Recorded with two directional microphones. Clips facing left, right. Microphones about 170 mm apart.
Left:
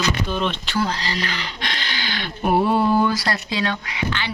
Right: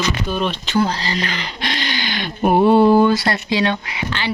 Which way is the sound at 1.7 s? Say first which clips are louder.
Right 7 dB; 15° right (ahead or behind).